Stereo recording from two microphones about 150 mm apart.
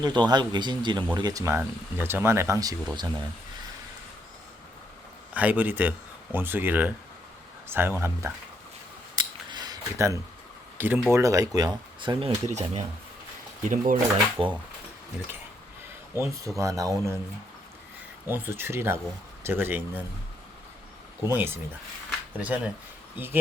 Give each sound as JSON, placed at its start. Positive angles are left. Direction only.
{"t": 0.0, "sound": "speech", "side_deg": -30}
{"t": 5.3, "sound": "speech", "side_deg": -10}
{"t": 9.1, "sound": "scissors", "side_deg": -30}
{"t": 10.8, "sound": "speech", "side_deg": -15}
{"t": 12.5, "sound": "speech", "side_deg": -50}
{"t": 13.7, "sound": "speech", "side_deg": -70}
{"t": 14.4, "sound": "speech", "side_deg": 0}
{"t": 16.2, "sound": "speech", "side_deg": -20}
{"t": 18.3, "sound": "speech", "side_deg": -15}
{"t": 21.2, "sound": "speech", "side_deg": -15}